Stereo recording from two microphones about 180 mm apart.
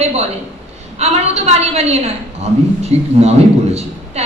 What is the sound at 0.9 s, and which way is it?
A woman's voice, 35° right (ahead or behind).